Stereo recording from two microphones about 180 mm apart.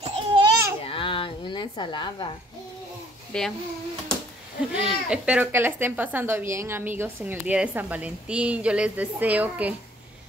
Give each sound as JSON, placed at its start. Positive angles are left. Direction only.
{"t": 0.0, "sound": "babbling", "side_deg": -30}
{"t": 0.8, "sound": "a sound", "side_deg": 30}
{"t": 3.3, "sound": "speech", "side_deg": 5}
{"t": 4.7, "sound": "speech", "side_deg": -5}